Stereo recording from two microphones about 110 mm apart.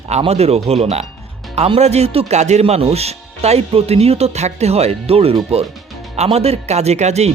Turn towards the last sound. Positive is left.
turn(degrees=-85)